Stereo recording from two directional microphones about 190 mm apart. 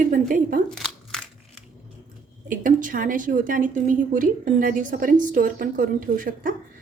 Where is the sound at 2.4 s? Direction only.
45° right (ahead or behind).